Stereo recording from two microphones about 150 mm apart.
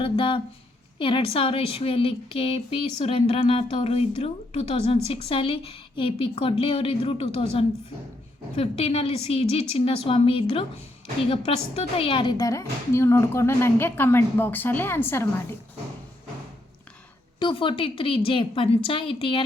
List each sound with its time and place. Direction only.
0.0 s a woman's voice: 35° left (ahead or behind); by 15.3 s 15° left (ahead or behind)
17.4 s a woman's voice: 35° left (ahead or behind)